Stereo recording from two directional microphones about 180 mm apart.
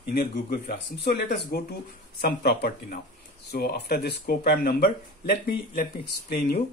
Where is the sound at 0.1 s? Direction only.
55° left (ahead or behind).